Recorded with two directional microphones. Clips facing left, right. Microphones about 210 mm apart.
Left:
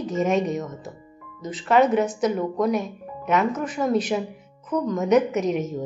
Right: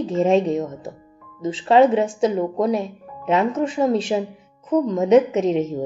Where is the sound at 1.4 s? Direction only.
25° right (ahead or behind).